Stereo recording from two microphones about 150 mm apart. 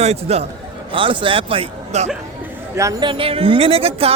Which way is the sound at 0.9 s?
35° right (ahead or behind).